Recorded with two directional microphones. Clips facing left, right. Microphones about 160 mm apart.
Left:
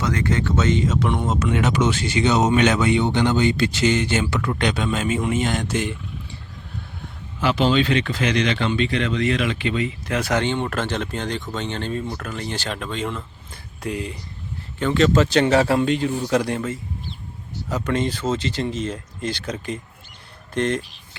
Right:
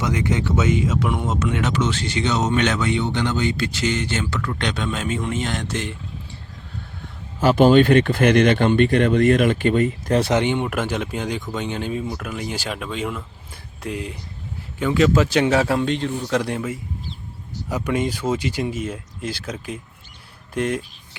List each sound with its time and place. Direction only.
0.0 s speech: 15° right (ahead or behind); by 1.7 s centre (ahead or behind)
1.7 s speech: 10° left (ahead or behind)
4.5 s a man's voice: 5° left (ahead or behind)
7.3 s speech: 45° right (ahead or behind)
10.2 s speech: 25° right (ahead or behind)
10.4 s a man's voice: 15° right (ahead or behind)